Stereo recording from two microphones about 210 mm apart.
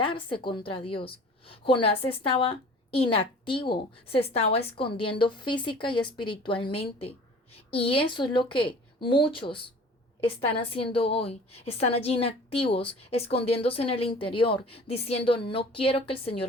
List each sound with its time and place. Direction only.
0.0 s a woman's voice: 25° left (ahead or behind)